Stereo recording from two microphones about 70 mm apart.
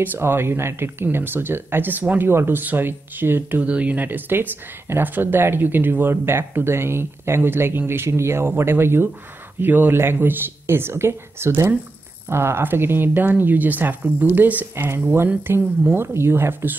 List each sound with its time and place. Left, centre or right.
0.0 s speech: right
3.6 s speech: centre
16.0 s speech: right